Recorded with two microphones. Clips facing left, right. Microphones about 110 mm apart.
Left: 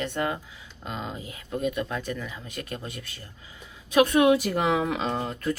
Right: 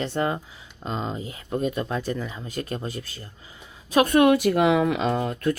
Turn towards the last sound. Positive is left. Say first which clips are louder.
# right 4 dB
turn(degrees=-60)  # may be behind; listen again after turning